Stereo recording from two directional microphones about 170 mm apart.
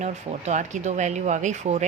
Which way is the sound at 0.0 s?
45° right (ahead or behind).